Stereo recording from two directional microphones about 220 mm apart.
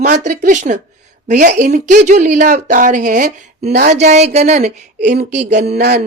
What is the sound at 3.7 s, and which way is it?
Speech, 45° right (ahead or behind).